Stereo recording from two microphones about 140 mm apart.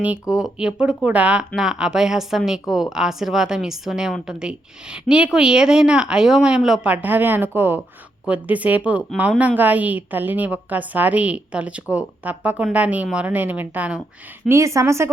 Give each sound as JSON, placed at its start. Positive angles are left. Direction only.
{"t": 0.0, "sound": "a woman's voice", "side_deg": -5}